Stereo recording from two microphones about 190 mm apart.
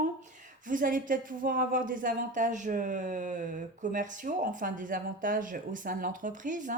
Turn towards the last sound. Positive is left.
turn(degrees=-40)  # may be behind; listen again after turning